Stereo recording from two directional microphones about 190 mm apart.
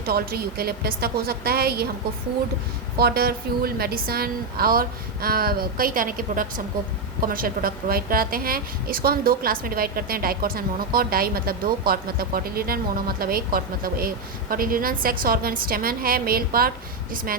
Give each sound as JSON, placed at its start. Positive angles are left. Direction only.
{"t": 0.0, "sound": "a woman's voice", "side_deg": -55}
{"t": 3.0, "sound": "a woman's voice", "side_deg": -55}